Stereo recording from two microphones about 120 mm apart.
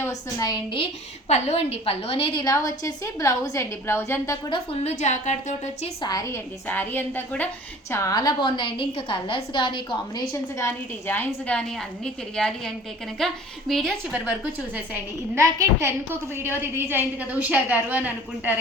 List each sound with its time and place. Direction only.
0.0 s a woman's voice: 30° left (ahead or behind)
1.3 s a woman's voice: 60° left (ahead or behind); by 2.5 s 45° left (ahead or behind)
2.5 s a woman's voice: 30° left (ahead or behind)
4.4 s a woman's voice: 40° left (ahead or behind)
4.8 s a woman's voice: 65° left (ahead or behind)
6.0 s a woman's voice: 30° left (ahead or behind)
6.7 s a woman's voice: 15° left (ahead or behind); by 10.2 s 40° left (ahead or behind)
10.3 s a woman's voice: 20° left (ahead or behind); by 13.9 s centre (ahead or behind)
15.4 s a woman's voice: 25° right (ahead or behind)